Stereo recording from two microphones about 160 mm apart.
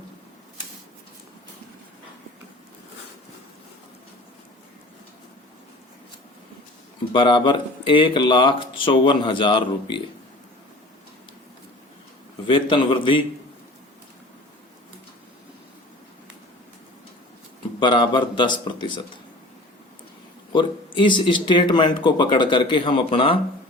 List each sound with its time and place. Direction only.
7.1 s speech: 30° left (ahead or behind)
12.5 s speech: 30° left (ahead or behind)
17.7 s a man's voice: 30° left (ahead or behind)
20.5 s speech: 30° left (ahead or behind)